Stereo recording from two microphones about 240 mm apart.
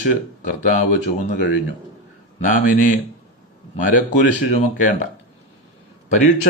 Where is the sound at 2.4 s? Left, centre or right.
Left.